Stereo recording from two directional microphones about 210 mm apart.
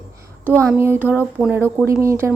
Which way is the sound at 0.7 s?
10° right (ahead or behind).